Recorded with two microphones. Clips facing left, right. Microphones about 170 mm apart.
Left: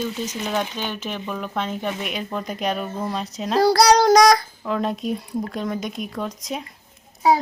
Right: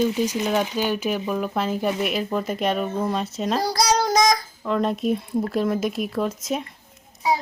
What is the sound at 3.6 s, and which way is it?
Child singing, 65° left (ahead or behind).